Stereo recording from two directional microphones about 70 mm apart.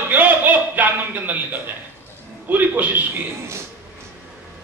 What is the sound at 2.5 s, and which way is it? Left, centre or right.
Speech, right.